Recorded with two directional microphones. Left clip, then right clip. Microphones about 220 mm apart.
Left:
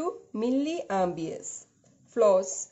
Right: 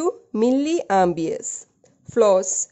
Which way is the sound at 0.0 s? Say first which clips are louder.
Right 10 dB; 50° right (ahead or behind).